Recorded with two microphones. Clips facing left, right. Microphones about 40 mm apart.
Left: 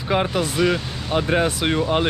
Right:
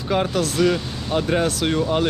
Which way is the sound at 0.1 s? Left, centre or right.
Centre.